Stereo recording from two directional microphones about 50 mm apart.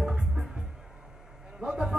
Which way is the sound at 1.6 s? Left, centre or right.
Right.